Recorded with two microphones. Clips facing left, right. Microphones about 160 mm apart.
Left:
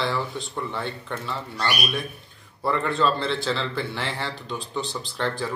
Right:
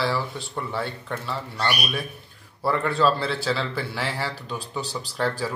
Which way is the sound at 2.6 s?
5° right (ahead or behind).